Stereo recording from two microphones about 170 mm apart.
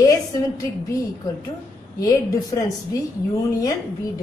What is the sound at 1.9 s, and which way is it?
A woman's voice, 20° left (ahead or behind).